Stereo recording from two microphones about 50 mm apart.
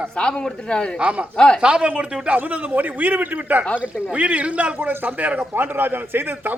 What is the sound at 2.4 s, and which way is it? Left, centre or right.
A man's voice, right.